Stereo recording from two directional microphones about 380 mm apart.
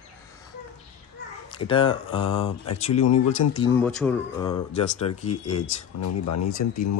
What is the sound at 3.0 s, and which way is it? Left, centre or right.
Speech, left.